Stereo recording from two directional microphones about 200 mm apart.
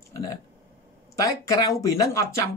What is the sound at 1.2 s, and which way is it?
Speech, 15° left (ahead or behind).